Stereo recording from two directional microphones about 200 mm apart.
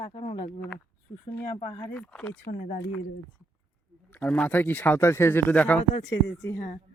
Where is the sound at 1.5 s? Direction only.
20° left (ahead or behind).